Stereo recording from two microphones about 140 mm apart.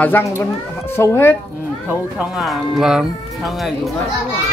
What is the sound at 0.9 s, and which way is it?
Speech, 20° left (ahead or behind).